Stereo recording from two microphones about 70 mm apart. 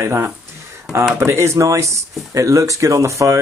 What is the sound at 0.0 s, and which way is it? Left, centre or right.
Speech, right.